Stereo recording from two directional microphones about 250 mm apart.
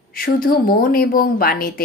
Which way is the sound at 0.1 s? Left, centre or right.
Left.